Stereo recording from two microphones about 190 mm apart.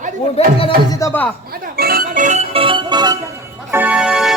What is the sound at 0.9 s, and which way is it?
Speech, 15° left (ahead or behind).